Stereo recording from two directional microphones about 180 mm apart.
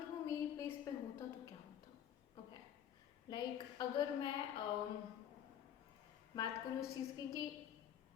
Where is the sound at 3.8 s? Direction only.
25° left (ahead or behind).